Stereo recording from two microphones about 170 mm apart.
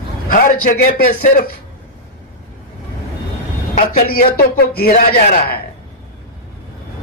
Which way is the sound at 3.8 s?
55° left (ahead or behind).